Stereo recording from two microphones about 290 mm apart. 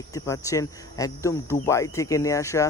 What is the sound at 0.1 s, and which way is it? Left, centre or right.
Speech, centre.